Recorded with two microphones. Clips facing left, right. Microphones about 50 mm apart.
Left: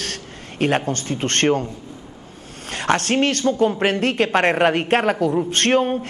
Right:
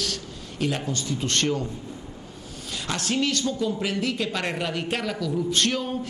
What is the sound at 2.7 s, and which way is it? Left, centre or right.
Speech, left.